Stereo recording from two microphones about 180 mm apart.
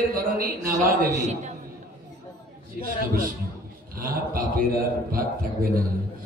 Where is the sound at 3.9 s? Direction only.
55° right (ahead or behind).